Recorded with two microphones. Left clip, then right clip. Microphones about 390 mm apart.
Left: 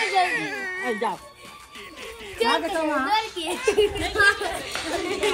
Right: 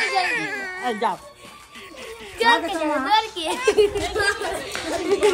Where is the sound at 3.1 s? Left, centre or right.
Centre.